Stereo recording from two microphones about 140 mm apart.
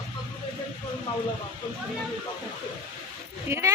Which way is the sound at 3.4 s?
20° right (ahead or behind).